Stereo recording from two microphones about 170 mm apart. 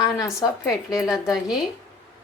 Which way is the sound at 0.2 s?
15° left (ahead or behind).